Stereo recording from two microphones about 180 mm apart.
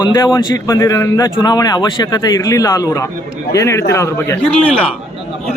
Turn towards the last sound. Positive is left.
turn(degrees=5)  # may be behind; listen again after turning